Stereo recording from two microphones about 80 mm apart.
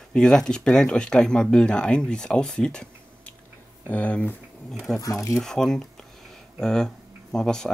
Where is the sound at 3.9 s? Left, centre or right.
Centre.